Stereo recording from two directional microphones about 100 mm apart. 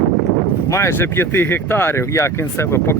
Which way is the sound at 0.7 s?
25° left (ahead or behind).